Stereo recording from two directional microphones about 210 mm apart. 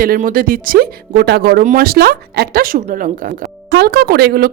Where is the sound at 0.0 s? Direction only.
40° right (ahead or behind).